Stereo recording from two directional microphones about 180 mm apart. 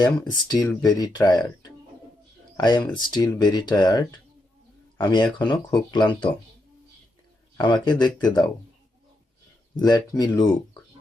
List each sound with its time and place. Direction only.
0.0 s speech: 25° left (ahead or behind)
2.6 s speech: 25° left (ahead or behind)
7.6 s speech: 25° left (ahead or behind)
9.7 s speech: 20° left (ahead or behind)